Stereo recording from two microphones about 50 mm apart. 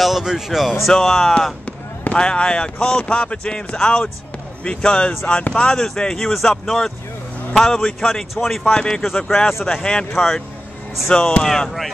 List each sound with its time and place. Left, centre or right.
0.0 s speech: centre
0.8 s a man's voice: centre
2.1 s a man's voice: left; by 8.7 s centre
8.7 s a man's voice: centre